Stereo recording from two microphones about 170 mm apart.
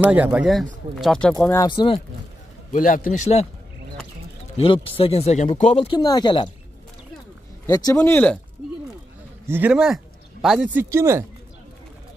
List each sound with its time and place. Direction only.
0.0 s speech: 10° right (ahead or behind)
1.3 s speech: 15° left (ahead or behind)
1.7 s speech: 25° left (ahead or behind)
2.7 s a man's voice: 55° left (ahead or behind)
4.8 s speech: 35° left (ahead or behind)
5.9 s speech: 25° left (ahead or behind)
7.6 s speech: 20° left (ahead or behind)
9.5 s speech: 10° right (ahead or behind)